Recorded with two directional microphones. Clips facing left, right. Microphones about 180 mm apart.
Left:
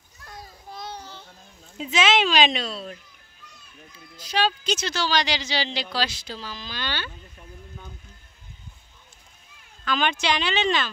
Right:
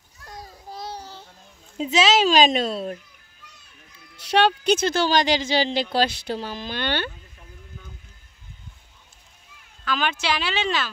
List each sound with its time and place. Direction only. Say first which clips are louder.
0.2 s a sound: right 2 dB; 35° right (ahead or behind)
1.8 s a woman's voice: right 3 dB; 35° right (ahead or behind)
4.3 s speech: right 6 dB; 65° right (ahead or behind)
9.8 s speech: left 1 dB; 5° right (ahead or behind)